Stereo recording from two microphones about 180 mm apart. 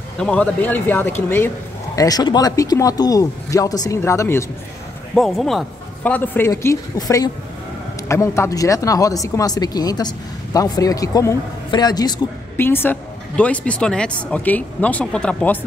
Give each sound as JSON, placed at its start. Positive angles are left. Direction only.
{"t": 0.2, "sound": "speech", "side_deg": 5}
{"t": 5.1, "sound": "speech", "side_deg": 0}